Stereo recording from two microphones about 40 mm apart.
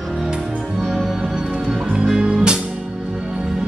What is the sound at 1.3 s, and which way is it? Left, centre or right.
Music, centre.